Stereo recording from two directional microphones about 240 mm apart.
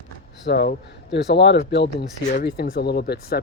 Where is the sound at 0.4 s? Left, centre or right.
Left.